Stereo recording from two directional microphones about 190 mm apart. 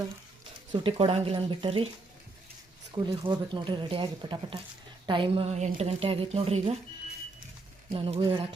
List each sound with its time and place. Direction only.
0.7 s speech: 30° right (ahead or behind)
2.9 s a woman's voice: 25° right (ahead or behind)
7.9 s speech: 30° right (ahead or behind)